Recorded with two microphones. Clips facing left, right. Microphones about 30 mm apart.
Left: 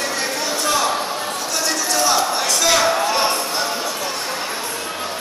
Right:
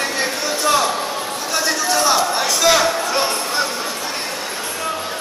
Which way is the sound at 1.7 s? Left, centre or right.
Centre.